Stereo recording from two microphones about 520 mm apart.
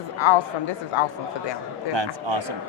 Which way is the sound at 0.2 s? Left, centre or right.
Left.